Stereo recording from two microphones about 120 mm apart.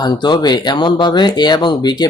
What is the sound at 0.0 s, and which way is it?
Speech, 35° left (ahead or behind).